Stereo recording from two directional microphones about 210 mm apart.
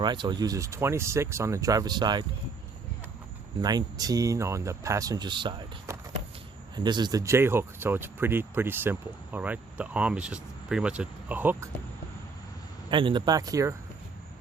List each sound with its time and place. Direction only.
0.0 s speech: 20° right (ahead or behind)
3.6 s speech: 20° right (ahead or behind)
12.9 s speech: 25° right (ahead or behind)